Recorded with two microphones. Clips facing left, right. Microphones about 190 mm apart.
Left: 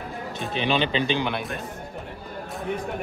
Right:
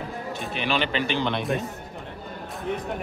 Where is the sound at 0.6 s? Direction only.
20° left (ahead or behind).